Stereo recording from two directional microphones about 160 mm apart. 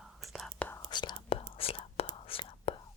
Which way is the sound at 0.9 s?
30° left (ahead or behind).